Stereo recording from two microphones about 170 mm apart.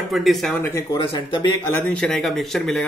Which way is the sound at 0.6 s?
15° left (ahead or behind).